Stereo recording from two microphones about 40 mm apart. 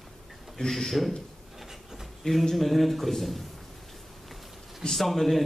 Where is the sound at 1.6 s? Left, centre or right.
Centre.